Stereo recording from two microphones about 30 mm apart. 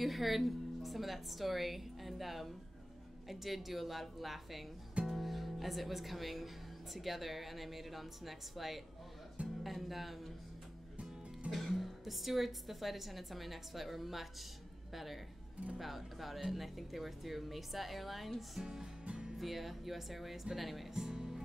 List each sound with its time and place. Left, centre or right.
0.0 s speech: centre
11.5 s speech: centre
18.6 s music: right
19.3 s speech: centre
20.9 s speech: right